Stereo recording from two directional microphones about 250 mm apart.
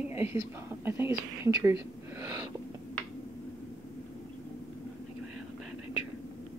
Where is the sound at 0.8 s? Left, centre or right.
Centre.